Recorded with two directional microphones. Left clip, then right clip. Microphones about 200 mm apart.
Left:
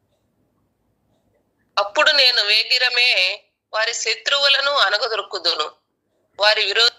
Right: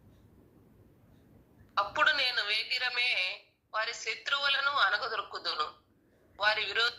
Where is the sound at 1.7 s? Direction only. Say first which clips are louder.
Left 12 dB; 55° left (ahead or behind).